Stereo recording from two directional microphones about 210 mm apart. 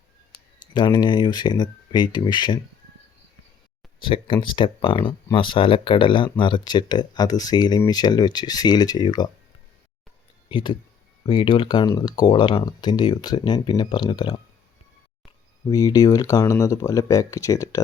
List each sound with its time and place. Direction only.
0.7 s speech: 20° left (ahead or behind)
4.0 s speech: 25° left (ahead or behind)
10.5 s speech: 20° left (ahead or behind)
15.7 s speech: 15° left (ahead or behind)